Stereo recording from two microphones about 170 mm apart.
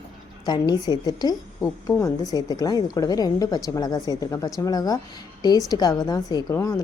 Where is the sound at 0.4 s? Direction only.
25° left (ahead or behind).